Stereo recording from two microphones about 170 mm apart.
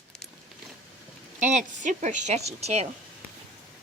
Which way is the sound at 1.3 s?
45° right (ahead or behind).